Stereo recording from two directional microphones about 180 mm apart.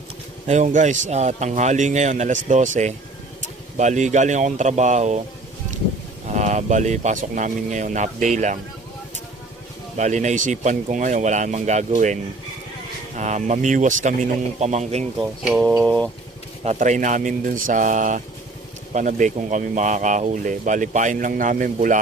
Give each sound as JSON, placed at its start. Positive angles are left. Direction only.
{"t": 0.4, "sound": "a man's voice", "side_deg": -40}
{"t": 6.3, "sound": "a man's voice", "side_deg": -40}
{"t": 10.0, "sound": "a man's voice", "side_deg": -40}
{"t": 15.2, "sound": "speech", "side_deg": -5}
{"t": 16.6, "sound": "speech", "side_deg": -45}